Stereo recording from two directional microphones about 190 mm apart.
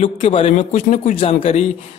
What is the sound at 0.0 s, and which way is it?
Speech, 35° left (ahead or behind).